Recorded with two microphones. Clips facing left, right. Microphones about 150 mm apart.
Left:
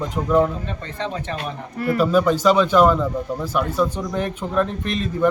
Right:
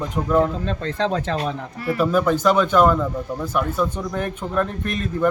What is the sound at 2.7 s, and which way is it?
A man's voice, 10° left (ahead or behind).